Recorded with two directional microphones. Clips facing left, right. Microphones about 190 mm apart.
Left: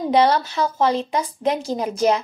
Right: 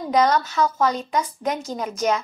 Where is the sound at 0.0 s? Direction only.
30° left (ahead or behind).